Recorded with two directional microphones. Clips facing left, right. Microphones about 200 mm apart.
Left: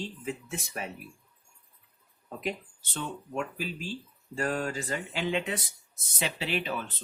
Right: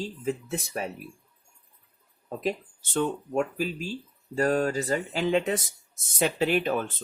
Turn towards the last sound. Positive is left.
turn(degrees=-45)  # may be behind; listen again after turning